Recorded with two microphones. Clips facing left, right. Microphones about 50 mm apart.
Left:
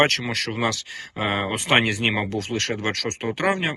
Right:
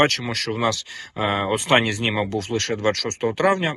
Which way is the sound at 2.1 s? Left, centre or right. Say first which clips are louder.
Right 2 dB; left.